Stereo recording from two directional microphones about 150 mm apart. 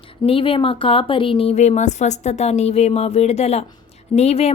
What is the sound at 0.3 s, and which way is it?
A woman's voice, 35° left (ahead or behind).